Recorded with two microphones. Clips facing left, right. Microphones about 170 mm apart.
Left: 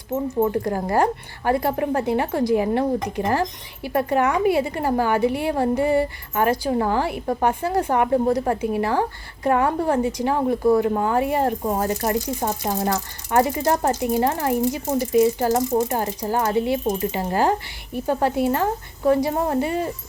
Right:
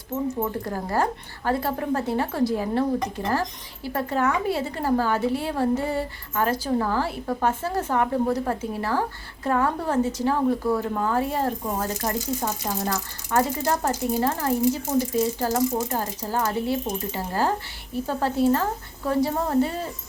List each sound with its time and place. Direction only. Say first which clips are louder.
0.7 s a woman's voice: left 5 dB; 15° left (ahead or behind)